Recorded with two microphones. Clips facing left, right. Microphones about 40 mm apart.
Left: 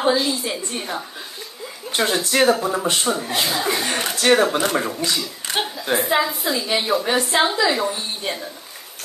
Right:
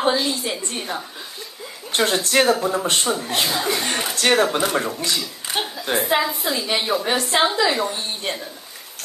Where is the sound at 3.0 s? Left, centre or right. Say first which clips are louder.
Even; centre.